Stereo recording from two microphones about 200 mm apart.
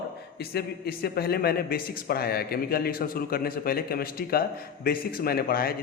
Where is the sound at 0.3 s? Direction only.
50° left (ahead or behind).